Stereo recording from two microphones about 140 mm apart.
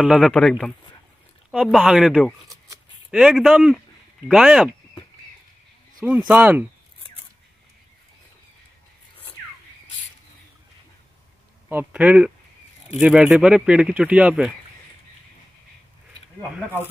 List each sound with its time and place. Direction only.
0.0 s speech: centre (ahead or behind)
1.5 s speech: 5° right (ahead or behind)
2.4 s shuffling cards: 25° right (ahead or behind)
3.1 s speech: 5° right (ahead or behind)
6.0 s speech: 10° right (ahead or behind)
11.7 s speech: 10° right (ahead or behind)